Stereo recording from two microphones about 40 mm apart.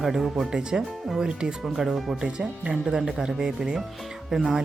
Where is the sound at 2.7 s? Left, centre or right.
Centre.